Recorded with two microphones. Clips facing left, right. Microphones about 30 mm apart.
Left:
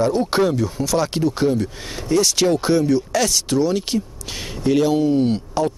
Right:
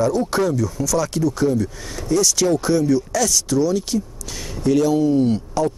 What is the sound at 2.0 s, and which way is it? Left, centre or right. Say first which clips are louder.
Speech: left 1 dB; left.